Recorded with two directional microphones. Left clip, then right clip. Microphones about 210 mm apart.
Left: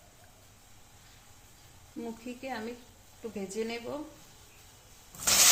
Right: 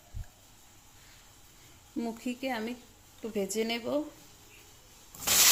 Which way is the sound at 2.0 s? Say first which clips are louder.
Right 5 dB; 45° right (ahead or behind).